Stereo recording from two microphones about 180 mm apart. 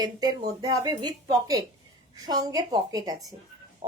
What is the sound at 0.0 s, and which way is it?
A woman's voice, 20° right (ahead or behind).